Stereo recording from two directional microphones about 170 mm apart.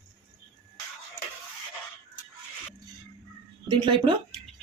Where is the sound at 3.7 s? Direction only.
30° right (ahead or behind).